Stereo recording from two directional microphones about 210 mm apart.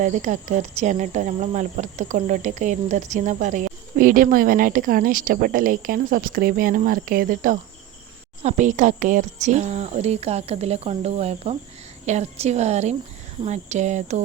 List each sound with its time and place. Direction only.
0.0 s speech: 35° right (ahead or behind)